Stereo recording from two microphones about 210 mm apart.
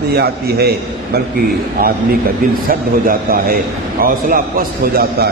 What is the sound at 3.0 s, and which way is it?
A man's voice, 45° right (ahead or behind).